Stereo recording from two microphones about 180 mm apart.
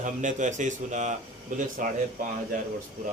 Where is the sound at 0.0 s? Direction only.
45° right (ahead or behind).